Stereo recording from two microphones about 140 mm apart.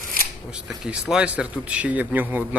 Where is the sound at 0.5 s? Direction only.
5° right (ahead or behind).